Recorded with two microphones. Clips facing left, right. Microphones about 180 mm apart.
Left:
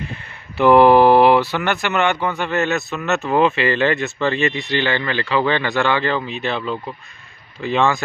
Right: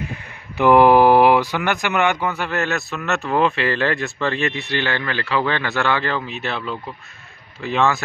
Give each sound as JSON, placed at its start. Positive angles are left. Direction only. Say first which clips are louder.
{"t": 0.0, "sound": "speech", "louder": "right 1 dB", "side_deg": -10}